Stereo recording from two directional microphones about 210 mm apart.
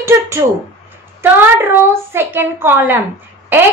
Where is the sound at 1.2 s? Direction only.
10° right (ahead or behind).